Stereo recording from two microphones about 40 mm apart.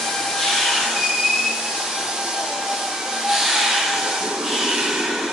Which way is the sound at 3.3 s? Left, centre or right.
Centre.